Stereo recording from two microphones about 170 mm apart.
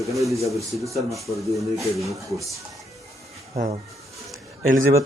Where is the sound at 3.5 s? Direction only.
40° right (ahead or behind).